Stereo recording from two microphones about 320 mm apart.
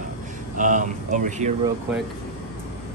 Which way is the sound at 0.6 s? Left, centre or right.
Right.